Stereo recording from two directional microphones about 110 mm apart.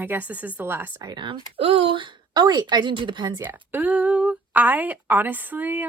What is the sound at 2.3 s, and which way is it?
A woman's voice, 40° right (ahead or behind).